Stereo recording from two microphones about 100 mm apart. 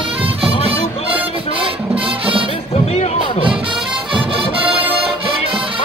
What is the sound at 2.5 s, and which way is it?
Music, 90° left.